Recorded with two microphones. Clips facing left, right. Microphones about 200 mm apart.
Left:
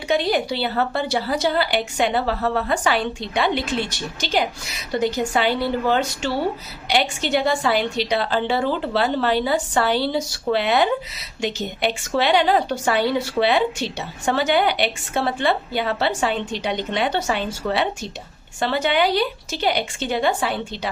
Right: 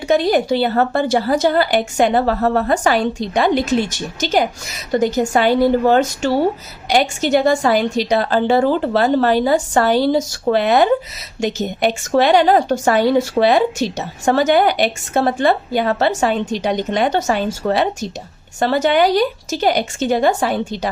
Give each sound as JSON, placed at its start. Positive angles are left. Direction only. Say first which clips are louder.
{"t": 0.1, "sound": "a woman's voice", "louder": "right 6 dB", "side_deg": -45}